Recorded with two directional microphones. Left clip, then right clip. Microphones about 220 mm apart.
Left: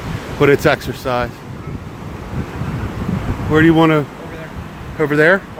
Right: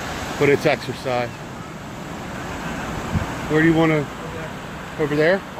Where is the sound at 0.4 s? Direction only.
30° left (ahead or behind).